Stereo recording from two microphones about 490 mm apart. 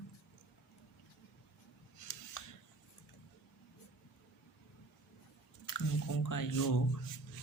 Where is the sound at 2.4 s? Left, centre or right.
Left.